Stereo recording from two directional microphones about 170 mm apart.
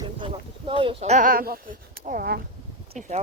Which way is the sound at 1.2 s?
60° right (ahead or behind).